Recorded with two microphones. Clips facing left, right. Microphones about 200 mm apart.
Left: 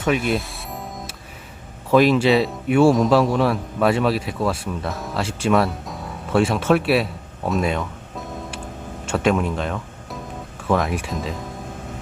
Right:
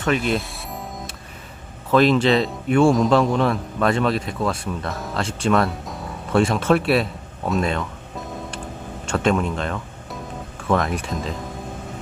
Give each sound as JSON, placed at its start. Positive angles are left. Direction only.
{"t": 0.0, "sound": "music", "side_deg": 5}
{"t": 1.9, "sound": "speech", "side_deg": 10}